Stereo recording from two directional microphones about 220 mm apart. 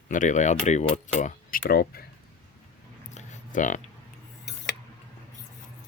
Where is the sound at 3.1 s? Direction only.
35° left (ahead or behind).